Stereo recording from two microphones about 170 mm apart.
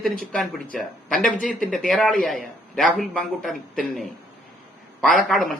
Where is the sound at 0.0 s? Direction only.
5° left (ahead or behind).